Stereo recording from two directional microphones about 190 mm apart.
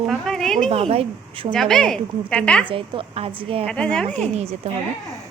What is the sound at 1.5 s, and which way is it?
Speech, 5° left (ahead or behind).